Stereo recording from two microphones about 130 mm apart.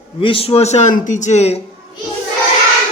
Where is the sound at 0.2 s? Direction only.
45° left (ahead or behind); by 1.5 s 60° left (ahead or behind).